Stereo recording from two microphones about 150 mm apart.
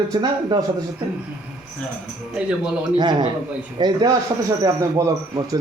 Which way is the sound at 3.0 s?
30° right (ahead or behind).